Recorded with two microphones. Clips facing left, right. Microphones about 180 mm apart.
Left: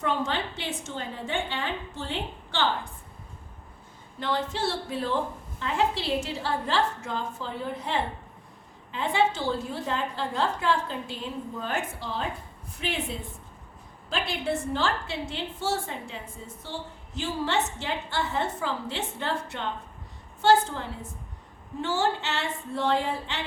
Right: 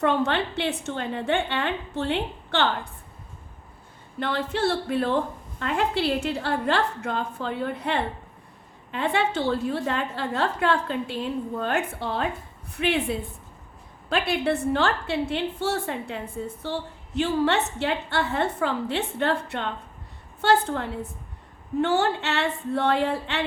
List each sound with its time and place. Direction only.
0.0 s a woman's voice: 65° right (ahead or behind)
4.2 s a woman's voice: 60° right (ahead or behind)